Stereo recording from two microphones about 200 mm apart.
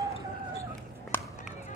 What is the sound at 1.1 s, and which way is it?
Run, 10° left (ahead or behind).